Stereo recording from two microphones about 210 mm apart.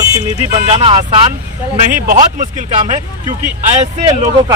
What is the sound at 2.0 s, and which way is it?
Speech, 35° right (ahead or behind).